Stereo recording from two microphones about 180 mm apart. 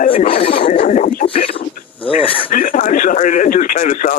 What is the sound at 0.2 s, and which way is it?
Speech, 45° left (ahead or behind).